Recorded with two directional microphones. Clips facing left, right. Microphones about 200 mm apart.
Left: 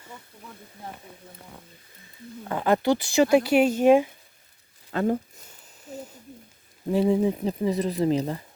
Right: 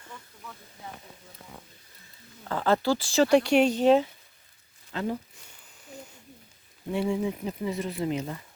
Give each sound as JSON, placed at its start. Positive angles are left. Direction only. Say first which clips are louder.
{"t": 2.4, "sound": "speech", "louder": "left 2 dB", "side_deg": 15}
{"t": 4.9, "sound": "speech", "louder": "left 6 dB", "side_deg": 50}
{"t": 7.1, "sound": "speech", "louder": "left 6 dB", "side_deg": 35}